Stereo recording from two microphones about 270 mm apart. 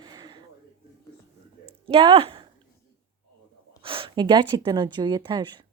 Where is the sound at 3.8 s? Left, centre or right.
Centre.